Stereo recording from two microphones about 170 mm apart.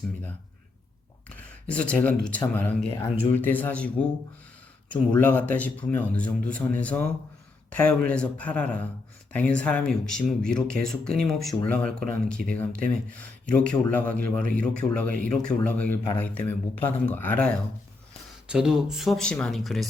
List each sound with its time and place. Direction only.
1.3 s a sound: 10° left (ahead or behind)
2.2 s speech: 10° left (ahead or behind)
2.9 s speech: 35° left (ahead or behind)
3.3 s speech: 10° left (ahead or behind)
15.0 s speech: 55° right (ahead or behind)
15.4 s speech: 10° left (ahead or behind)
18.4 s speech: 5° right (ahead or behind)